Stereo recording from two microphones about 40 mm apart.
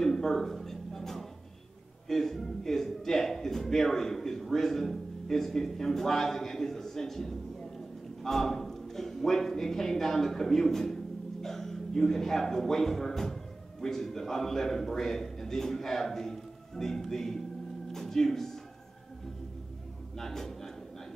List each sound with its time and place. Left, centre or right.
0.0 s a sound: centre
2.0 s a man's voice: centre
20.2 s speech: centre